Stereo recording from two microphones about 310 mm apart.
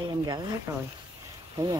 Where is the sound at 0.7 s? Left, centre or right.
Centre.